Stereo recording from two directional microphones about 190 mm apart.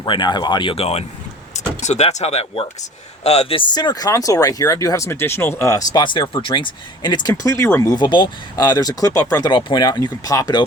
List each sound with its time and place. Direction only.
0.0 s speech: 25° left (ahead or behind)